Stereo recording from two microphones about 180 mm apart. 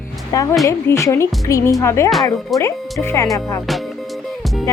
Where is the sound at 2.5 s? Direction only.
15° left (ahead or behind).